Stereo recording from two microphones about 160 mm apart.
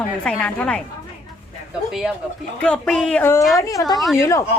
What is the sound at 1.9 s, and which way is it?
A woman's voice, 5° right (ahead or behind).